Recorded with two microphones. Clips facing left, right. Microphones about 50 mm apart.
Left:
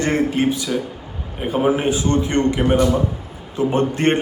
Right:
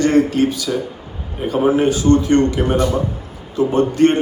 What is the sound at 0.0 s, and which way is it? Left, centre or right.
A man's voice, left.